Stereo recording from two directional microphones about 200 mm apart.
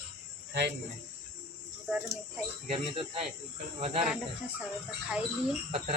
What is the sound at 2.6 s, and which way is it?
Speech, 30° right (ahead or behind).